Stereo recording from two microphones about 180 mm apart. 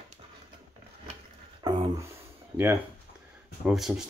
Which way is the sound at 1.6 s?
25° right (ahead or behind).